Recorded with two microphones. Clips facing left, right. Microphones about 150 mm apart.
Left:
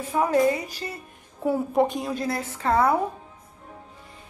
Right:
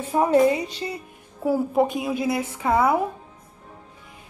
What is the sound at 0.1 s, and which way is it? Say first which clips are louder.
Speech: right 3 dB; 25° right (ahead or behind).